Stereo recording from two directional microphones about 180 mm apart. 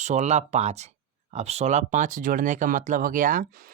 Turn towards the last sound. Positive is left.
turn(degrees=-50)  # may be behind; listen again after turning